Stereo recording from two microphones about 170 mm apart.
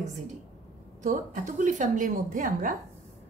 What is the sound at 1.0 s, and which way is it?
A woman's voice, 45° right (ahead or behind).